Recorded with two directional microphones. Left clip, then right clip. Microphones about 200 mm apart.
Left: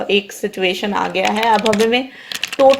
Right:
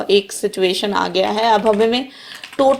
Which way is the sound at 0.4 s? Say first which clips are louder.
Right 1 dB; 25° right (ahead or behind).